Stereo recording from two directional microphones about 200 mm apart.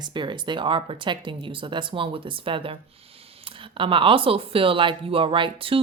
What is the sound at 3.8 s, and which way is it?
Speech, 25° right (ahead or behind).